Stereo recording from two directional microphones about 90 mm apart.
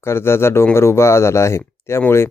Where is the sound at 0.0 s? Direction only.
30° left (ahead or behind).